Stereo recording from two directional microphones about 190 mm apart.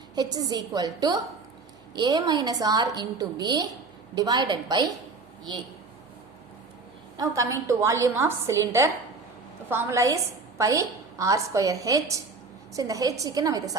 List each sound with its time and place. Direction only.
0.2 s a woman's voice: 20° right (ahead or behind)
7.2 s a woman's voice: 15° right (ahead or behind)